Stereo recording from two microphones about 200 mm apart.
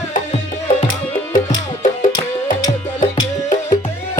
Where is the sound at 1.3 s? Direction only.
40° left (ahead or behind).